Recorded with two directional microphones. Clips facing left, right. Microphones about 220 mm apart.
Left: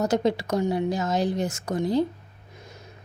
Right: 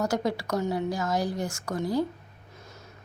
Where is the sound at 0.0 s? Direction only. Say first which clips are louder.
Left 4 dB; 20° left (ahead or behind).